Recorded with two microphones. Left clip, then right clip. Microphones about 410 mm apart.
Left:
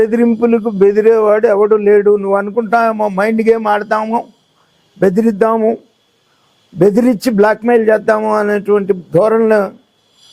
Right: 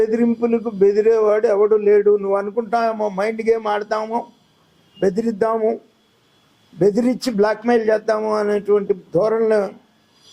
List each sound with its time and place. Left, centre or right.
0.0 s speech: left
6.7 s speech: left